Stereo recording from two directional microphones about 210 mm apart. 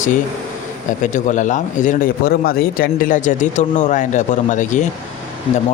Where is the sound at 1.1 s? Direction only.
35° left (ahead or behind).